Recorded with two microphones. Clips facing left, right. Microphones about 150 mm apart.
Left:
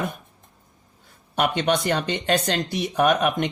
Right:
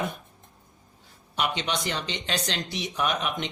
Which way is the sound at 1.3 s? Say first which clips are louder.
Left 7 dB; 50° left (ahead or behind).